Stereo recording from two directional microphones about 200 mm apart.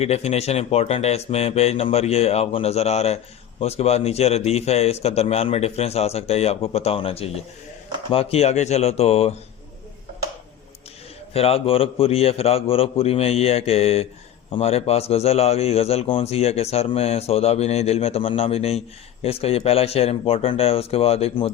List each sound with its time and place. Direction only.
0.0 s a man's voice: 30° left (ahead or behind)
11.3 s a man's voice: 30° left (ahead or behind)